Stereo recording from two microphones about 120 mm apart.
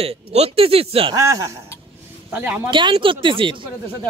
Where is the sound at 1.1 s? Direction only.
25° right (ahead or behind).